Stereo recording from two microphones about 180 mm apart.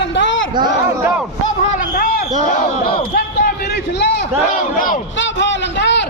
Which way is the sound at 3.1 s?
55° left (ahead or behind).